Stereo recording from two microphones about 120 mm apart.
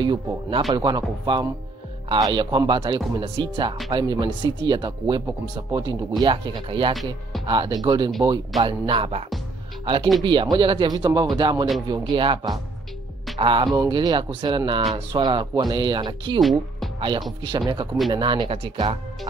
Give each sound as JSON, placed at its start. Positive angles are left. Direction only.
{"t": 0.0, "sound": "speech", "side_deg": -40}
{"t": 8.6, "sound": "speech", "side_deg": -45}
{"t": 10.2, "sound": "speech", "side_deg": -40}
{"t": 16.3, "sound": "speech", "side_deg": 0}
{"t": 17.4, "sound": "speech", "side_deg": -40}